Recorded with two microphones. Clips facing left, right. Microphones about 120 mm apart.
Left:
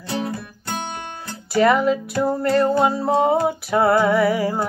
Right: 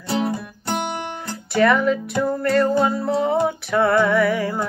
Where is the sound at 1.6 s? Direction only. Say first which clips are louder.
Left 1 dB; 30° left (ahead or behind).